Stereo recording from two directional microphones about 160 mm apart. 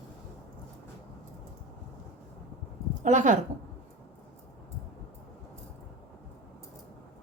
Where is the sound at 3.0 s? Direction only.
50° right (ahead or behind).